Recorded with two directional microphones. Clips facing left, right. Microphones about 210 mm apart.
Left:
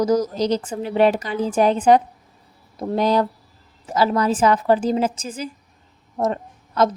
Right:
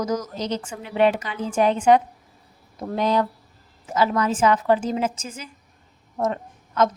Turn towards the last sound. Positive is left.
turn(degrees=35)  # may be behind; listen again after turning